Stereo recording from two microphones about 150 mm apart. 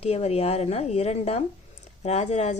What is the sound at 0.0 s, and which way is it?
A woman's voice, 45° left (ahead or behind).